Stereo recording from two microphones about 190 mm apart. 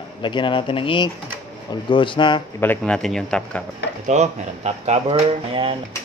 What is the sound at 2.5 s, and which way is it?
A man's voice, 10° left (ahead or behind).